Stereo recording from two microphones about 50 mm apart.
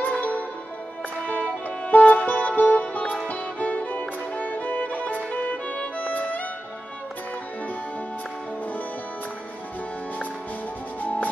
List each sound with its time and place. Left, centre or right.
0.0 s music: left
3.3 s violin: left
5.9 s music: left